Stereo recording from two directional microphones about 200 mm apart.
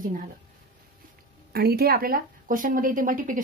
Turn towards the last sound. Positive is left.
turn(degrees=-40)  # may be behind; listen again after turning